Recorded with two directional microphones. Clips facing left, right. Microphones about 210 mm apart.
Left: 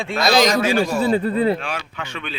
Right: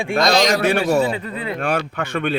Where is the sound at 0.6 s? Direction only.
65° right (ahead or behind).